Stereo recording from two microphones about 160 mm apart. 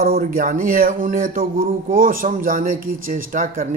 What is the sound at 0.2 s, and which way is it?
Speech, 55° right (ahead or behind).